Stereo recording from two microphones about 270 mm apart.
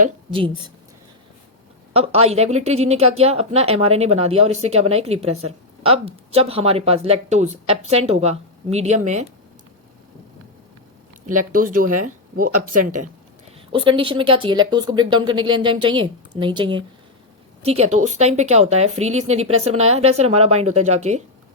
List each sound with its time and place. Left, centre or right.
0.0 s a woman's voice: centre
1.9 s a woman's voice: right
11.5 s speech: right
13.7 s a woman's voice: centre